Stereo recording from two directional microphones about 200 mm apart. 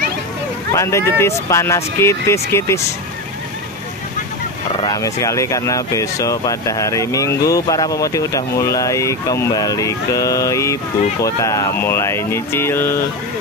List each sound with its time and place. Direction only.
0.7 s speech: 15° left (ahead or behind)
4.7 s speech: 20° left (ahead or behind)